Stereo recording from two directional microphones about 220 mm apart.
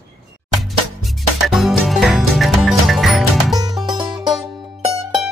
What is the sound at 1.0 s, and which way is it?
Music, centre (ahead or behind).